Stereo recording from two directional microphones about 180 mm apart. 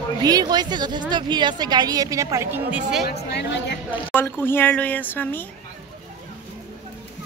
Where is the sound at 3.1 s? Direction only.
70° left (ahead or behind).